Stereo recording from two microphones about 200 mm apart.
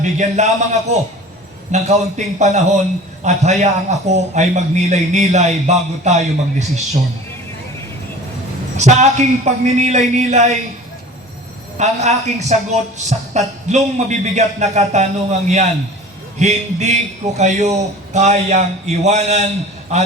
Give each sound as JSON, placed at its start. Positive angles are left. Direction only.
{"t": 0.0, "sound": "a man's voice", "side_deg": -35}
{"t": 8.8, "sound": "a man's voice", "side_deg": -35}
{"t": 11.8, "sound": "a man's voice", "side_deg": -35}